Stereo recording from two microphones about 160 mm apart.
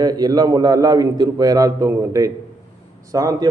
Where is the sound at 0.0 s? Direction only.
25° right (ahead or behind).